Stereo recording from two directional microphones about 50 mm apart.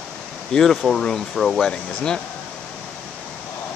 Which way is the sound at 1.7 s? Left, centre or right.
Centre.